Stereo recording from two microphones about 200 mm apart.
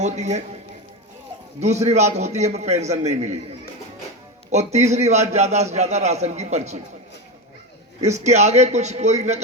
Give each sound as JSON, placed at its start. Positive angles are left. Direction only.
{"t": 0.0, "sound": "a man's voice", "side_deg": -35}
{"t": 1.5, "sound": "a man's voice", "side_deg": -35}
{"t": 4.5, "sound": "a man's voice", "side_deg": -35}
{"t": 8.0, "sound": "a man's voice", "side_deg": -35}